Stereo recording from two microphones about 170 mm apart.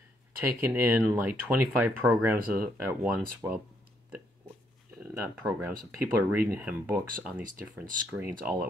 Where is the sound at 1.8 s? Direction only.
10° right (ahead or behind).